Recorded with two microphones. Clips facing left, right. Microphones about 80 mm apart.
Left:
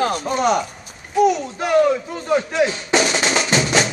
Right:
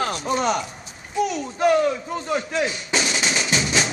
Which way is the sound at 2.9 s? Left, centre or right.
Left.